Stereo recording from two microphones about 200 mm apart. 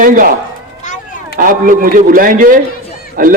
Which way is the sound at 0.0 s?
45° right (ahead or behind).